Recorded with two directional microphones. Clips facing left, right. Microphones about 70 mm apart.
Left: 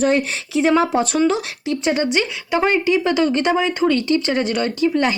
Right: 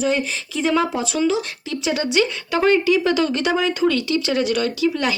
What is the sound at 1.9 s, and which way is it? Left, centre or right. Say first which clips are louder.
Speech: even; left.